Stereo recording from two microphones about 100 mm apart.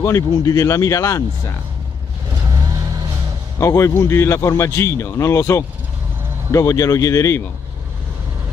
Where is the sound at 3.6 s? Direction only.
30° left (ahead or behind).